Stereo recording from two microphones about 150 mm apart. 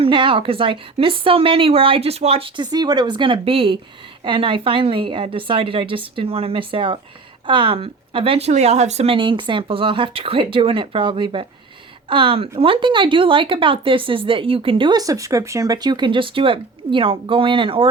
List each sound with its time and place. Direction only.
0.0 s speech: 35° right (ahead or behind)